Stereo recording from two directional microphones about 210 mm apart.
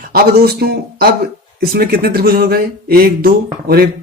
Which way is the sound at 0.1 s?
45° right (ahead or behind).